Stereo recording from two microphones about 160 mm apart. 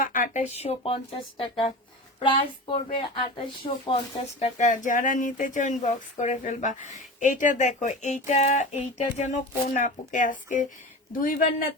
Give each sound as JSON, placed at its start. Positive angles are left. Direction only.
{"t": 0.0, "sound": "speech", "side_deg": 55}
{"t": 0.5, "sound": "a woman's voice", "side_deg": 40}